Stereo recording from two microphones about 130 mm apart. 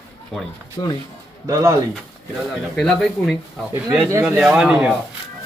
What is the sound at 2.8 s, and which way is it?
Speech, 5° left (ahead or behind).